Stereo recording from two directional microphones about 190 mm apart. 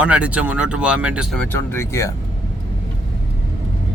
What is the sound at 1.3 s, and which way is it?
Speech, 10° left (ahead or behind).